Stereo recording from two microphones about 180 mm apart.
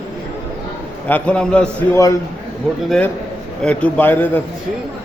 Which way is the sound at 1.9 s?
15° left (ahead or behind).